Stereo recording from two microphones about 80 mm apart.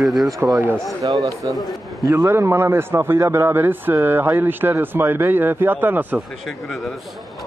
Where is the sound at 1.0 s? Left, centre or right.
Right.